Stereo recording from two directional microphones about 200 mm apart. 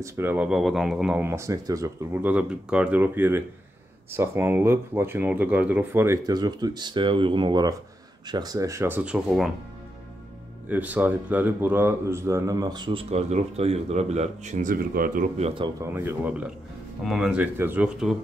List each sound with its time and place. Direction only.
0.0 s speech: 10° right (ahead or behind)
10.7 s speech: 10° right (ahead or behind); by 15.7 s 30° right (ahead or behind)
15.8 s speech: 10° right (ahead or behind)